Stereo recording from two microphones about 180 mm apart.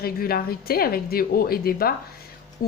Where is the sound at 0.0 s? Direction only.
55° left (ahead or behind).